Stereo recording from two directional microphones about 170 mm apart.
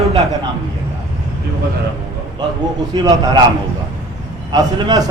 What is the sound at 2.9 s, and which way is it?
Speech, 25° right (ahead or behind).